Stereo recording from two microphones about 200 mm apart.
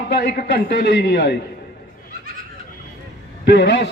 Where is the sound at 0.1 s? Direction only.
55° left (ahead or behind).